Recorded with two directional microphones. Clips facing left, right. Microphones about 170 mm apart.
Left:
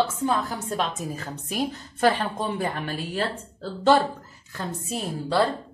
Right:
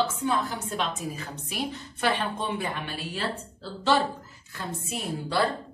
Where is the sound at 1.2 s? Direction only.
45° left (ahead or behind).